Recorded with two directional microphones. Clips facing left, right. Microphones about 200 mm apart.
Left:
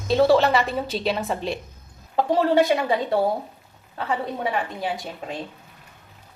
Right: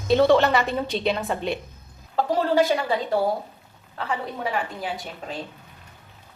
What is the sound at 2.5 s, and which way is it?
Speech, 15° left (ahead or behind).